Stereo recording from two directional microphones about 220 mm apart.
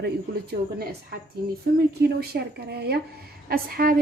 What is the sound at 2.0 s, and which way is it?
Speech, 45° right (ahead or behind).